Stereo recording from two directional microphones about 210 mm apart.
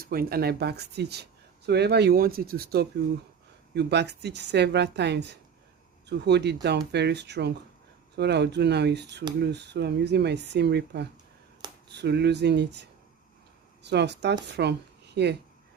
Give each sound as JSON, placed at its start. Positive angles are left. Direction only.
{"t": 0.0, "sound": "speech", "side_deg": -45}
{"t": 13.8, "sound": "speech", "side_deg": -55}